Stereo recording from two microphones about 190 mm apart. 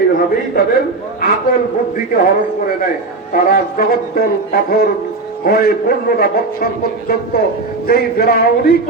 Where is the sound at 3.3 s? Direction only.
50° left (ahead or behind).